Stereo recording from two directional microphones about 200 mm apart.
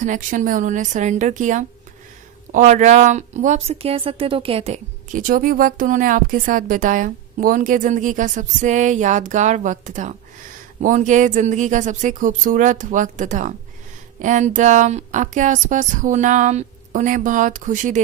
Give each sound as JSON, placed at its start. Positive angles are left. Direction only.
{"t": 0.0, "sound": "a woman's voice", "side_deg": -40}